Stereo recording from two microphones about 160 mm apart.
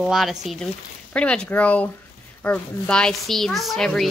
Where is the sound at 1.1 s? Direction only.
5° left (ahead or behind).